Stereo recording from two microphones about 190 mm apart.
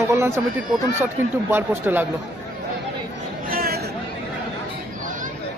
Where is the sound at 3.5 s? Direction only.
50° right (ahead or behind).